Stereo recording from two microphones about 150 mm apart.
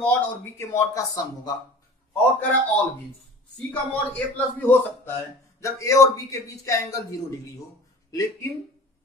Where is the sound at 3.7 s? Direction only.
10° left (ahead or behind).